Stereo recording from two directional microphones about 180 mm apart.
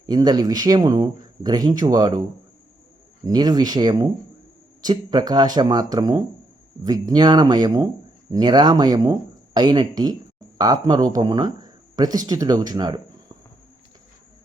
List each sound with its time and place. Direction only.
0.0 s speech: 20° right (ahead or behind)
3.2 s speech: 20° right (ahead or behind)